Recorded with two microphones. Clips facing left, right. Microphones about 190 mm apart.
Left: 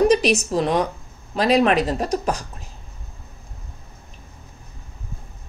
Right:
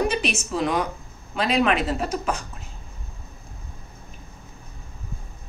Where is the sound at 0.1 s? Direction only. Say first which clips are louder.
Left 8 dB; 40° left (ahead or behind).